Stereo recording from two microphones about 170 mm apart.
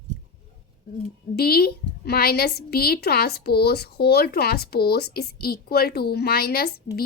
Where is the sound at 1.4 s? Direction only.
65° left (ahead or behind).